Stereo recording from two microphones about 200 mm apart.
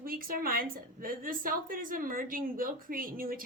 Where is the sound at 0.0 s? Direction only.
45° right (ahead or behind).